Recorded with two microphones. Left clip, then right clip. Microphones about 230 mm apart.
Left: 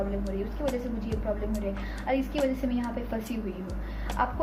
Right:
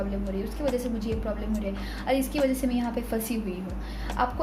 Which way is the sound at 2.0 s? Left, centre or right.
Right.